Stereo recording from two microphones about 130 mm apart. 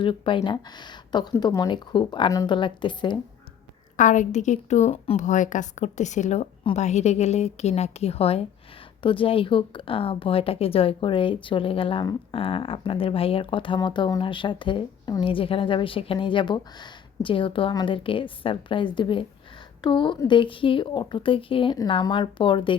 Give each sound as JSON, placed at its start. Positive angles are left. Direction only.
{"t": 0.0, "sound": "speech", "side_deg": 40}
{"t": 3.9, "sound": "a woman's voice", "side_deg": 75}
{"t": 5.2, "sound": "a woman's voice", "side_deg": 70}